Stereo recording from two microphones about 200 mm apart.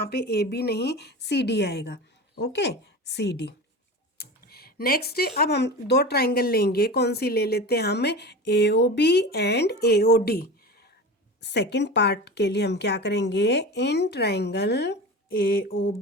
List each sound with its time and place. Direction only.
0.0 s a woman's voice: 50° left (ahead or behind)
4.2 s computer keyboard: 50° left (ahead or behind)
5.4 s a woman's voice: 55° left (ahead or behind)